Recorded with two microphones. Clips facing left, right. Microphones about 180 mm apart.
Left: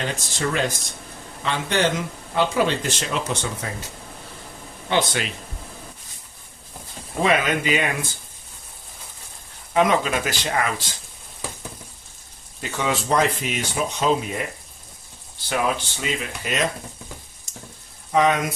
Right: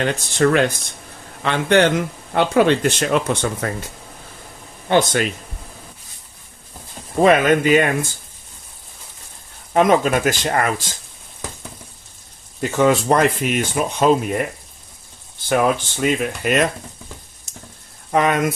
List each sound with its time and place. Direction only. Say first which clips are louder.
0.0 s speech: right 9 dB; 60° right (ahead or behind)
4.9 s speech: right 6 dB; 50° right (ahead or behind)
7.2 s speech: right 7 dB; 50° right (ahead or behind)
9.7 s speech: right 4 dB; 45° right (ahead or behind)
12.7 s speech: right 6 dB; 50° right (ahead or behind)
15.4 s speech: right 6 dB; 50° right (ahead or behind)
18.1 s speech: right 2 dB; 55° right (ahead or behind)